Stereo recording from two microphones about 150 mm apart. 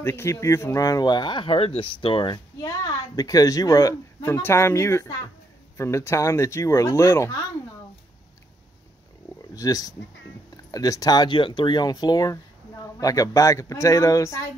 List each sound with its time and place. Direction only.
0.0 s speech: 15° left (ahead or behind)
9.5 s speech: 25° left (ahead or behind)